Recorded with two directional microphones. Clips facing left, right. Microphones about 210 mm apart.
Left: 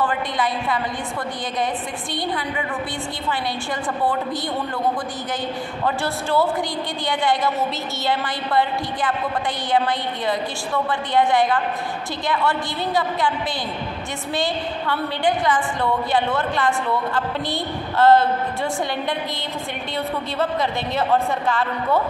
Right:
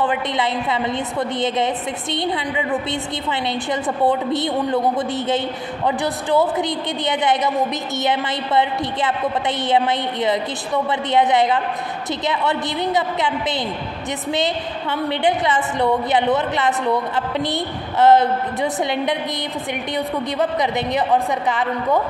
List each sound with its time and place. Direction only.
0.0 s a woman's voice: 20° right (ahead or behind)
2.1 s a woman's voice: 20° right (ahead or behind)
20.3 s a woman's voice: 20° right (ahead or behind)